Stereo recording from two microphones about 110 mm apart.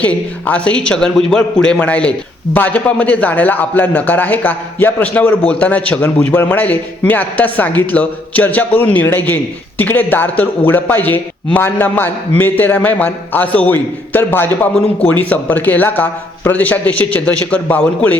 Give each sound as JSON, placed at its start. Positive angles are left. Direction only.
{"t": 0.0, "sound": "speech", "side_deg": 10}